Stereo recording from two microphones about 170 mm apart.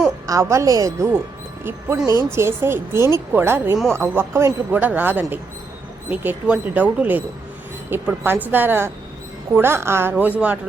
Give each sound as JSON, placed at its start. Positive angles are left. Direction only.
{"t": 0.3, "sound": "a woman's voice", "side_deg": -20}
{"t": 2.3, "sound": "a man's voice", "side_deg": -15}